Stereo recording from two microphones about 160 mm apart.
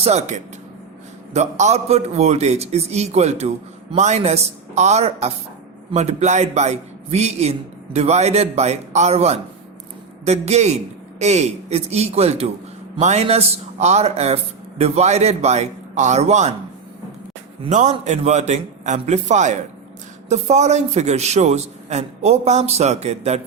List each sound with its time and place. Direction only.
0.0 s a man's voice: 45° right (ahead or behind)
17.7 s a man's voice: 50° right (ahead or behind)